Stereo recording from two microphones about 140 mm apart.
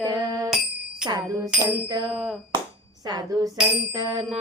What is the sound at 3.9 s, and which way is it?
Bicycle bell, 30° right (ahead or behind).